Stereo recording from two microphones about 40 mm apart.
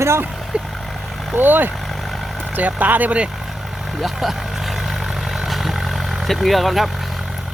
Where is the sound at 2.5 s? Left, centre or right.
Right.